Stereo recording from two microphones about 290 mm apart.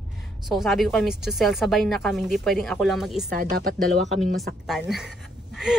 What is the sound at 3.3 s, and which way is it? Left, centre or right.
Speech, right.